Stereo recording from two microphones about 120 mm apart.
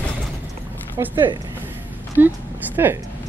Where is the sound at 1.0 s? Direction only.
35° right (ahead or behind).